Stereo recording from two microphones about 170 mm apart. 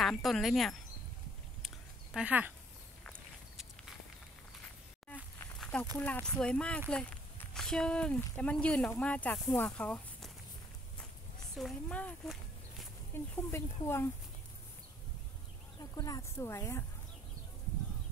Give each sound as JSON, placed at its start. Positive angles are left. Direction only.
{"t": 0.0, "sound": "speech", "side_deg": 0}
{"t": 2.1, "sound": "speech", "side_deg": -10}
{"t": 3.0, "sound": "walk", "side_deg": 5}
{"t": 5.6, "sound": "a sound", "side_deg": 5}
{"t": 5.9, "sound": "speech", "side_deg": 10}
{"t": 11.5, "sound": "speech", "side_deg": 5}
{"t": 15.8, "sound": "speech", "side_deg": 20}